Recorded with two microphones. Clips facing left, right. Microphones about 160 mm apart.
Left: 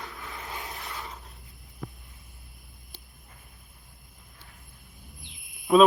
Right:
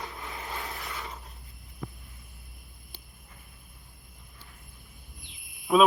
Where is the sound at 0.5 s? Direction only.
20° left (ahead or behind).